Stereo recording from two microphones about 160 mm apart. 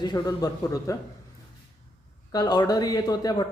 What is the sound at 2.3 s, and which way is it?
Speech, 25° left (ahead or behind).